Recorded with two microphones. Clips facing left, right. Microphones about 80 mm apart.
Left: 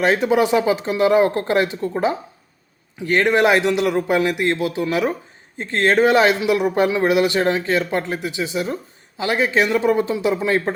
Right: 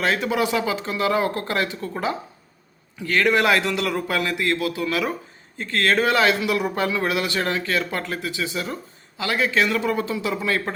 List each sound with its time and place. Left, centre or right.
0.0 s a man's voice: left